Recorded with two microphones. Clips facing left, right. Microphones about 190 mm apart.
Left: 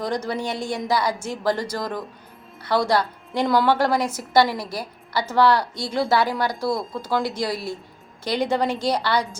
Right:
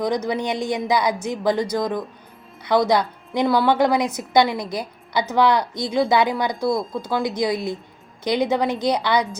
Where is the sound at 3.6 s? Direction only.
15° right (ahead or behind).